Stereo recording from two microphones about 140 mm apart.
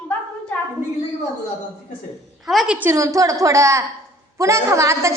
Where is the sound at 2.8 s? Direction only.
20° right (ahead or behind).